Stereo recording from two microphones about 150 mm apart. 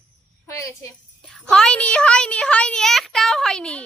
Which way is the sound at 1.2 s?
Centre (ahead or behind).